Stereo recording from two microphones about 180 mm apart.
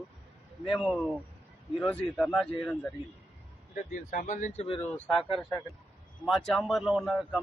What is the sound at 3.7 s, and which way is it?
Speech, 45° left (ahead or behind).